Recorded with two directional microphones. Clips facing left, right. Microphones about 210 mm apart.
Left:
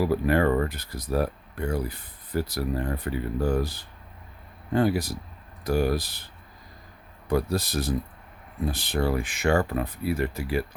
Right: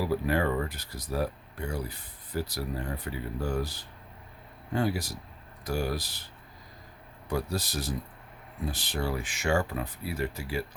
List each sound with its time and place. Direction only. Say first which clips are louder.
0.3 s speech: left 6 dB; 55° left (ahead or behind)
4.7 s speech: left 6 dB; 55° left (ahead or behind)
7.3 s speech: left 6 dB; 55° left (ahead or behind)